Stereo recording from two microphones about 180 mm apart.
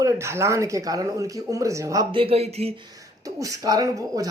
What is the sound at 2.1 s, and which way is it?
Speech, 30° right (ahead or behind).